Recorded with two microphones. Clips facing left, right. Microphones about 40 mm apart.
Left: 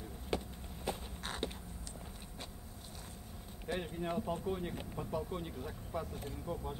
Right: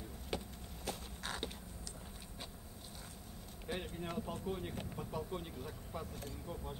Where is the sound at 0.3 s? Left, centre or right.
Centre.